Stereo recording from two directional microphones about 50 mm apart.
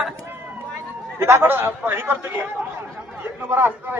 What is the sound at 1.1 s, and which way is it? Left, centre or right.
A man's voice, right.